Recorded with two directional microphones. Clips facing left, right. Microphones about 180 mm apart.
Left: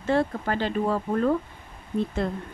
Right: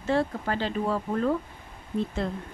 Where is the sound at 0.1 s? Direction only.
55° left (ahead or behind).